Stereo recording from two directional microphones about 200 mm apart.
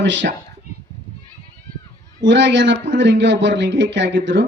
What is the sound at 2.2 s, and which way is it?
Speech, 65° right (ahead or behind).